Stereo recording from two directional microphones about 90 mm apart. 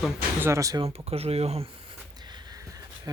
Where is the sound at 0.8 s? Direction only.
90° right.